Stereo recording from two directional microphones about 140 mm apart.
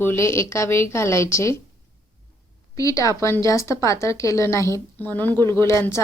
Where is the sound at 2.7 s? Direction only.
25° left (ahead or behind).